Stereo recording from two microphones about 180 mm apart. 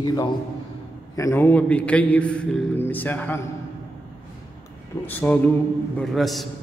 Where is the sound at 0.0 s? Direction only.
25° left (ahead or behind).